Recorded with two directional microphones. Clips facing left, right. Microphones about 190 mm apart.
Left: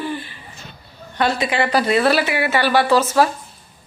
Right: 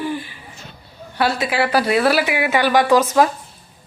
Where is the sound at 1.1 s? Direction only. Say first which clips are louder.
Even; 5° right (ahead or behind).